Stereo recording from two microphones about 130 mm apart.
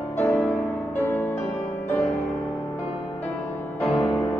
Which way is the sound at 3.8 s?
5° left (ahead or behind).